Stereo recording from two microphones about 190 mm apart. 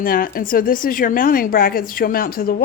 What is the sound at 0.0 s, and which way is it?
Speech, 50° left (ahead or behind).